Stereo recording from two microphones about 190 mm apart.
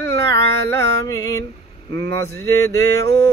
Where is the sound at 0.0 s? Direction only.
15° left (ahead or behind).